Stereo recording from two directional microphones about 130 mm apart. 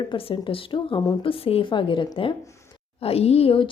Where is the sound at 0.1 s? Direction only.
40° left (ahead or behind).